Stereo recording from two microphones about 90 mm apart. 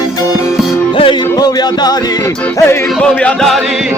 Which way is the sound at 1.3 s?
50° left (ahead or behind).